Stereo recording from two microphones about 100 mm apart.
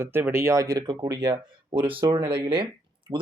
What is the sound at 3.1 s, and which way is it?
Speech, 45° right (ahead or behind).